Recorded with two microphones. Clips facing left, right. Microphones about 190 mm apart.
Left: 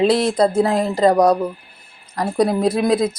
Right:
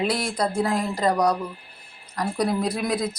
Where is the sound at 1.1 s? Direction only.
50° left (ahead or behind).